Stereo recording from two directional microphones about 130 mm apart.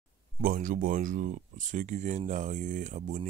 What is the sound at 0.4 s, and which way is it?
Speech, 90° right.